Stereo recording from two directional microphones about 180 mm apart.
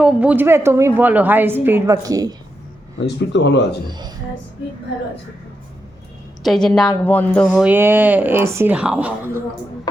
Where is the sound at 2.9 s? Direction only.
75° left (ahead or behind).